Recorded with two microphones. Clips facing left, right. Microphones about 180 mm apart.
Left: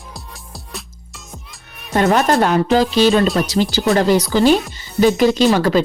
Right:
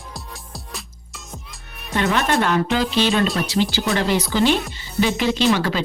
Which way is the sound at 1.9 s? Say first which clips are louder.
Left 6 dB; 40° left (ahead or behind).